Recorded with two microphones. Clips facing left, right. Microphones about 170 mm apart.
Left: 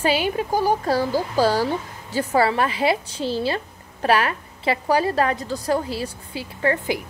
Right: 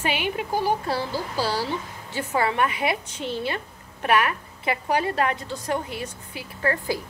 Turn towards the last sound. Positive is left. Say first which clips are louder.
# left 3 dB
turn(degrees=25)  # may be behind; listen again after turning